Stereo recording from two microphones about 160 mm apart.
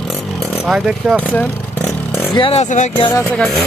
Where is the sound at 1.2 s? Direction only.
10° left (ahead or behind).